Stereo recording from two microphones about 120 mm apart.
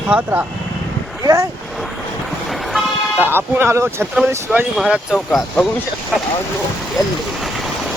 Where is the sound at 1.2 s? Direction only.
30° right (ahead or behind).